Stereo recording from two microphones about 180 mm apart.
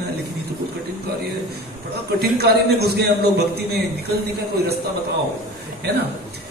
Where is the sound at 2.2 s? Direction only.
60° right (ahead or behind).